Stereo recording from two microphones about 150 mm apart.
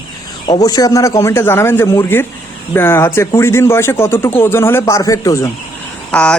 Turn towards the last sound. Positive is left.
turn(degrees=5)  # may be behind; listen again after turning